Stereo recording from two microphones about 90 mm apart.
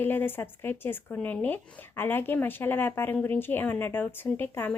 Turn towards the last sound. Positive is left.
turn(degrees=25)  # may be behind; listen again after turning